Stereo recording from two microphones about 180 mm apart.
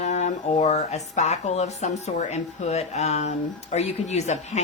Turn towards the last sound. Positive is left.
turn(degrees=40)  # may be behind; listen again after turning